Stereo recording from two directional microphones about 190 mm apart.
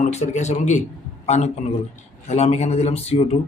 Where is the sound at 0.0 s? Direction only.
35° left (ahead or behind).